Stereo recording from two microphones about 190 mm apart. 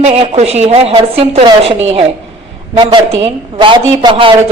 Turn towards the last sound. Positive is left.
turn(degrees=-25)  # may be behind; listen again after turning